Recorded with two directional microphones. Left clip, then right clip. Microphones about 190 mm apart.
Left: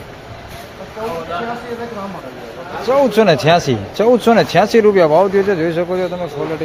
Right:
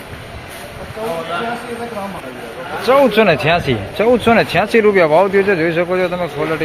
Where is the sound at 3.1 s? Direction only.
20° left (ahead or behind).